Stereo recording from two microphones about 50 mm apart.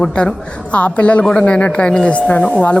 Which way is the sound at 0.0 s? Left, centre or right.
Centre.